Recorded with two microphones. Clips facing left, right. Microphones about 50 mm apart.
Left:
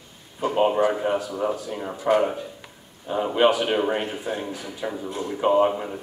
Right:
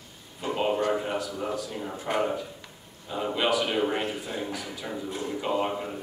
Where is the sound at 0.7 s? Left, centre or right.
Centre.